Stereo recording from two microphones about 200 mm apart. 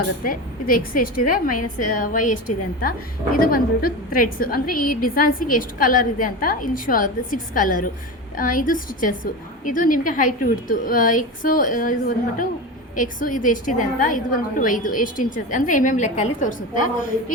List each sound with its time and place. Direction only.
0.3 s a woman's voice: 45° left (ahead or behind)
3.4 s a woman's voice: 45° left (ahead or behind)